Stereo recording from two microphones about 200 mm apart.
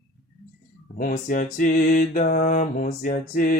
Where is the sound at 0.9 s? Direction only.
40° left (ahead or behind).